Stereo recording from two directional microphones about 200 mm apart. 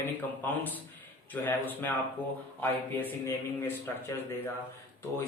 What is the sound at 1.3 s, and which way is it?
Speech, 10° left (ahead or behind).